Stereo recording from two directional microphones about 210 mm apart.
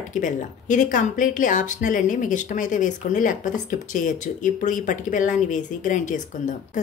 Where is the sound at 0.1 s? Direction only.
35° left (ahead or behind).